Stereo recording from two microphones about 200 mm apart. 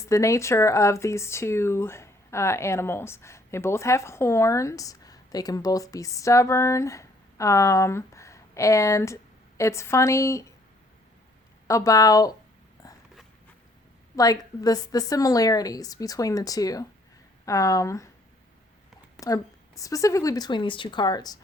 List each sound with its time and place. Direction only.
0.0 s speech: 15° left (ahead or behind)
11.7 s speech: 15° left (ahead or behind)
12.8 s a sound: 15° left (ahead or behind)
14.2 s speech: 20° left (ahead or behind)
19.2 s a woman's voice: 15° left (ahead or behind)